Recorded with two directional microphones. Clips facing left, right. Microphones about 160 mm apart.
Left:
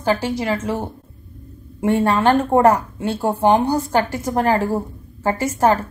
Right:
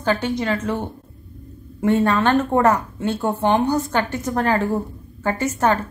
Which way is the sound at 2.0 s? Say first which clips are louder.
Left 2 dB; 30° left (ahead or behind).